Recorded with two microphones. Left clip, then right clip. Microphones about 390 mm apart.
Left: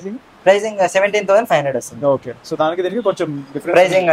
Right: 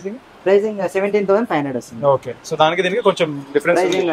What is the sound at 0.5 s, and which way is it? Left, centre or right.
Speech, centre.